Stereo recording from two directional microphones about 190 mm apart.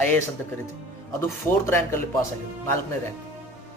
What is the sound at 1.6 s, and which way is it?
Speech, 10° left (ahead or behind).